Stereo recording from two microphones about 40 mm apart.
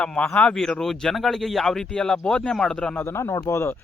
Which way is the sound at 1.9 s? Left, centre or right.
Centre.